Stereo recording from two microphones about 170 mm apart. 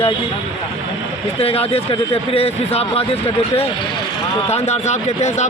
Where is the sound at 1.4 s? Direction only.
35° left (ahead or behind).